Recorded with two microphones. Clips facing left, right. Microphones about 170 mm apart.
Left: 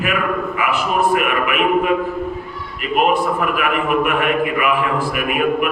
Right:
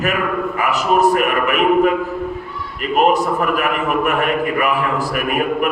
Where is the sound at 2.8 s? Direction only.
40° right (ahead or behind).